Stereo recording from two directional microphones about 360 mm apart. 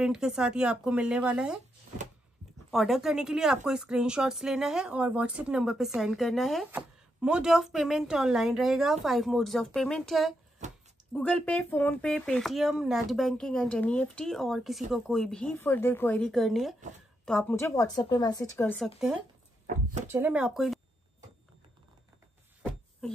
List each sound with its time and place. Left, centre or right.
0.0 s a woman's voice: centre
2.7 s a woman's voice: centre
19.6 s speech: right
20.1 s a woman's voice: centre